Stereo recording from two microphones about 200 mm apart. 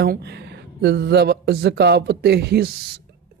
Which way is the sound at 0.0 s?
55° right (ahead or behind).